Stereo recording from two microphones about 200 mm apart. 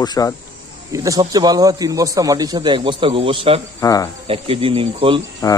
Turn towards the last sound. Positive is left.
turn(degrees=15)  # may be behind; listen again after turning